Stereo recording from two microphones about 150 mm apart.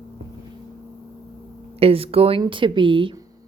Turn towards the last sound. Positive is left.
turn(degrees=-30)  # may be behind; listen again after turning